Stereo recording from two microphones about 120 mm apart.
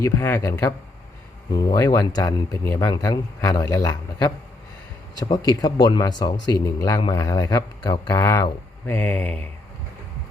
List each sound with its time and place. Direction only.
0.0 s a man's voice: 25° left (ahead or behind)
5.5 s a man's voice: 35° left (ahead or behind)
8.2 s a man's voice: 25° left (ahead or behind)